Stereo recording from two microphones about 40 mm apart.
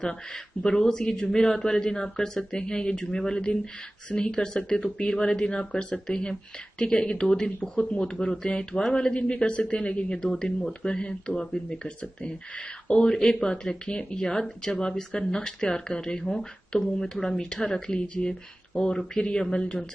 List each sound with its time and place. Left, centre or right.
0.6 s a man's voice: centre
10.2 s a man's voice: centre
10.9 s speech: left
13.1 s a man's voice: centre
17.9 s speech: left